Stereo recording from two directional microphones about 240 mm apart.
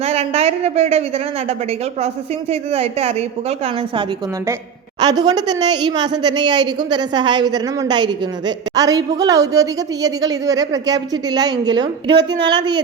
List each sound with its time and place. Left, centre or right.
0.0 s a woman's voice: right